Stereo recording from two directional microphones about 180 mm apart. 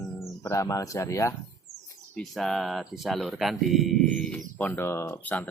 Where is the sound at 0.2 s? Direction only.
15° left (ahead or behind).